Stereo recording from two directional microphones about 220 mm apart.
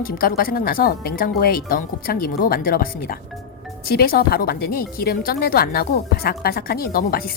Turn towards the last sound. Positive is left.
turn(degrees=40)  # may be behind; listen again after turning